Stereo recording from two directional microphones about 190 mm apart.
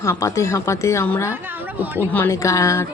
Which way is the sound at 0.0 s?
15° left (ahead or behind).